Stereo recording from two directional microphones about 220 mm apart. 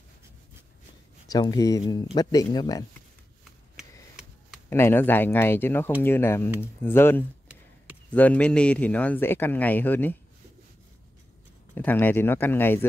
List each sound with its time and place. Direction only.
1.2 s a man's voice: 15° left (ahead or behind)
4.6 s a man's voice: 10° left (ahead or behind)
11.7 s a man's voice: 10° left (ahead or behind)